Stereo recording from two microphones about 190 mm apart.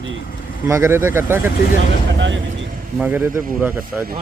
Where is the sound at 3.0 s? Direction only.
10° right (ahead or behind).